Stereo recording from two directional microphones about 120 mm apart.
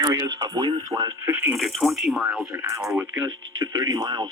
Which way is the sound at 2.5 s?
25° right (ahead or behind).